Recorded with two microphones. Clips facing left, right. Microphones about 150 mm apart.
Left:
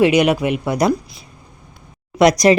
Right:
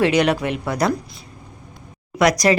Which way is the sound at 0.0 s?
10° left (ahead or behind).